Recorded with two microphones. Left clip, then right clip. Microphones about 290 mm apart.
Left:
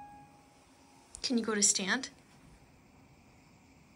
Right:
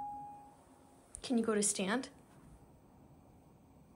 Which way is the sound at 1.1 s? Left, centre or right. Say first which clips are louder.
Left 1 dB; centre.